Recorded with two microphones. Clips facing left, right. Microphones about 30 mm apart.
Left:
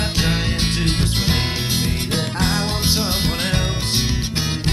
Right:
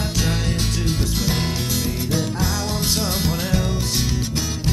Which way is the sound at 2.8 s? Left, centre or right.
Left.